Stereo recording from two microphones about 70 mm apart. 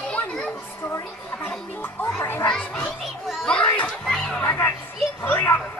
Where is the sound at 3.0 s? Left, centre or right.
Centre.